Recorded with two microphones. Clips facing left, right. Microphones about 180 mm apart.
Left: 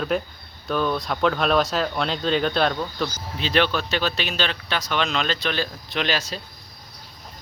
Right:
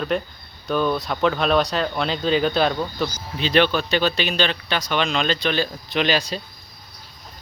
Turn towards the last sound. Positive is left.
turn(degrees=0)  # may be behind; listen again after turning